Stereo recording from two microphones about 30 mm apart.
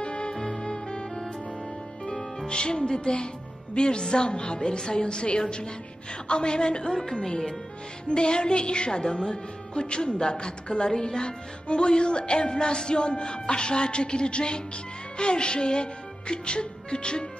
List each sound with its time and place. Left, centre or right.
0.0 s music: left
2.4 s music: left
6.9 s a woman's voice: centre
8.1 s music: left